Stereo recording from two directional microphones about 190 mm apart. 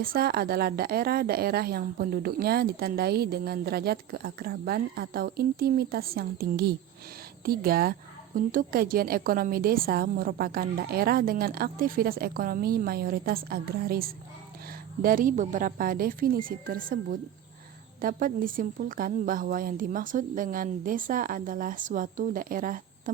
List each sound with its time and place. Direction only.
0.0 s a woman's voice: 50° right (ahead or behind)